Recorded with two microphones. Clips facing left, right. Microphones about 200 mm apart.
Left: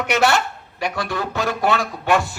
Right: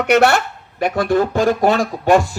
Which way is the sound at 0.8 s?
50° right (ahead or behind).